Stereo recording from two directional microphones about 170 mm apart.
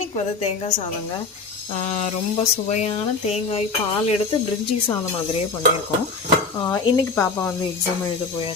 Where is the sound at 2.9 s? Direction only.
30° left (ahead or behind).